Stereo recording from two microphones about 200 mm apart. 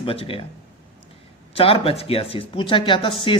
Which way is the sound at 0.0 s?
30° left (ahead or behind).